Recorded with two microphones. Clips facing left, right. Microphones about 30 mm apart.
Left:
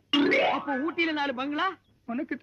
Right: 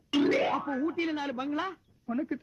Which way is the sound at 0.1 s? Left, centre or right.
Left.